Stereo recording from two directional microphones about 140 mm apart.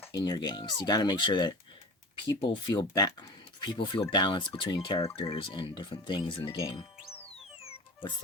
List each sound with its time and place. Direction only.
0.2 s speech: 30° left (ahead or behind)
7.3 s music: 45° left (ahead or behind)